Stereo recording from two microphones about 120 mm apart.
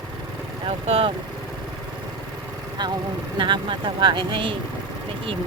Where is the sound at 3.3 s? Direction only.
40° right (ahead or behind).